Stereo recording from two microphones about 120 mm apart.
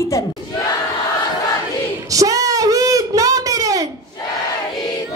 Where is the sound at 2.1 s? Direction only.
30° right (ahead or behind).